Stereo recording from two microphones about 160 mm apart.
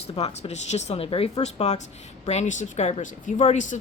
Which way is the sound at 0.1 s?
40° left (ahead or behind).